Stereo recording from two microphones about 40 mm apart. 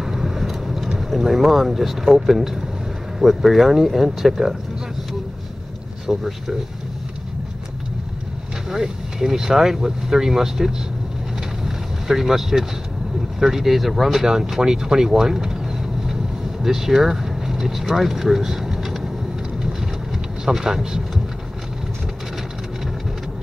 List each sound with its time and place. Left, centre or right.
0.0 s vehicle: centre
0.9 s speech: centre
6.0 s speech: centre
8.6 s speech: centre
11.6 s vehicle: centre
13.4 s speech: centre
14.2 s speech: centre
14.6 s vehicle: centre
16.6 s speech: centre
20.4 s speech: centre